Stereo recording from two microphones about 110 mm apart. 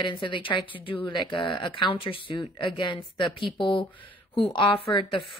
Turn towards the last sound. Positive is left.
turn(degrees=50)  # may be behind; listen again after turning